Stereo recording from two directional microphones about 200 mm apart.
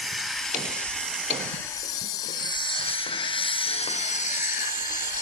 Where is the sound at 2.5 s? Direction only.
25° left (ahead or behind).